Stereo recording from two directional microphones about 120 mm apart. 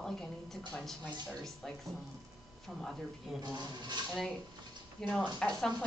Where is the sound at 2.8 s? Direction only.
Centre (ahead or behind).